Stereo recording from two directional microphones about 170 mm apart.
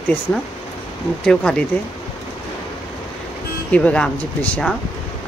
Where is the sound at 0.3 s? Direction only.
10° left (ahead or behind).